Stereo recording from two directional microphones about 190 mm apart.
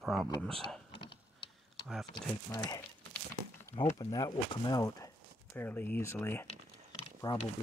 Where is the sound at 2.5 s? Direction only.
15° left (ahead or behind).